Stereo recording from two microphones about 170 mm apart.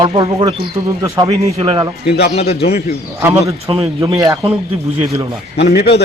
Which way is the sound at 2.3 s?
40° left (ahead or behind).